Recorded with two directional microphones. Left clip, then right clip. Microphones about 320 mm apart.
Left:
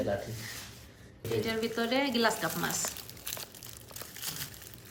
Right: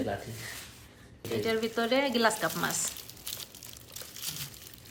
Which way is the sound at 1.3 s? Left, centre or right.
Centre.